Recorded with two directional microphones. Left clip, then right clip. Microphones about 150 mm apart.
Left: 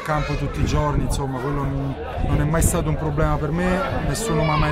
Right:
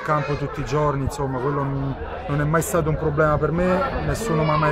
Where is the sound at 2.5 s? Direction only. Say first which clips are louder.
Right 4 dB; centre (ahead or behind).